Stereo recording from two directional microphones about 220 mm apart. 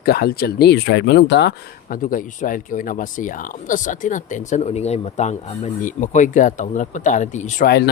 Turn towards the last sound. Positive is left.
turn(degrees=45)  # may be behind; listen again after turning